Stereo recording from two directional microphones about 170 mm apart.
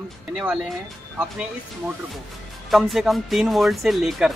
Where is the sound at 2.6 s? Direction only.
Centre (ahead or behind).